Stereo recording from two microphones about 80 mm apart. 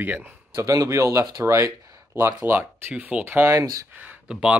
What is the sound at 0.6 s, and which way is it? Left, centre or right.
Speech, right.